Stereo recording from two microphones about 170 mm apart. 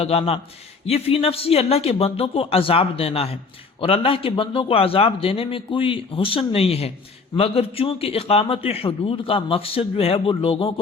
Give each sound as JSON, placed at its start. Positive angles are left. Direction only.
{"t": 0.0, "sound": "a man's voice", "side_deg": 35}